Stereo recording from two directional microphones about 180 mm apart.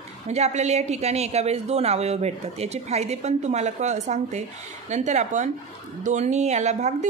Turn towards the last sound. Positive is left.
turn(degrees=-40)  # may be behind; listen again after turning